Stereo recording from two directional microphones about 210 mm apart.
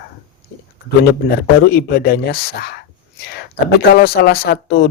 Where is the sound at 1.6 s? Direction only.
45° left (ahead or behind).